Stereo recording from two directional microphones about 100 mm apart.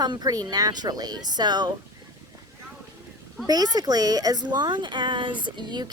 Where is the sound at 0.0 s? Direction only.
40° right (ahead or behind).